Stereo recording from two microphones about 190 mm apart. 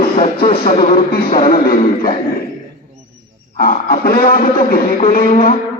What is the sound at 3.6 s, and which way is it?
A man's voice, 50° left (ahead or behind).